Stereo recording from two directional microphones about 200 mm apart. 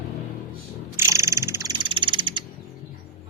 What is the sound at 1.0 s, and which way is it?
Frog, 15° right (ahead or behind).